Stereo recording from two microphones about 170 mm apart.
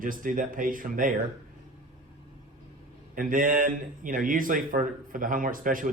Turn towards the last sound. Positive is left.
turn(degrees=-55)  # may be behind; listen again after turning